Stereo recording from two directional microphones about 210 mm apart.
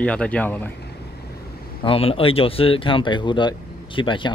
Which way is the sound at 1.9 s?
25° left (ahead or behind).